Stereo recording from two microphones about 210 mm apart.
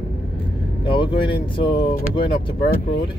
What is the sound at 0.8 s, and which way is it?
Speech, 25° left (ahead or behind).